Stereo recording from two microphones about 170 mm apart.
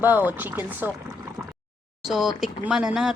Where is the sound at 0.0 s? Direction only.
10° right (ahead or behind).